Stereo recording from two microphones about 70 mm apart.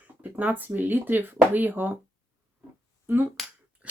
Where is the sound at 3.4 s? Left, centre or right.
Centre.